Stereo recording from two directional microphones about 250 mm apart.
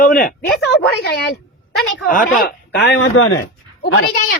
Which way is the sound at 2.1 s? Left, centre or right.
Left.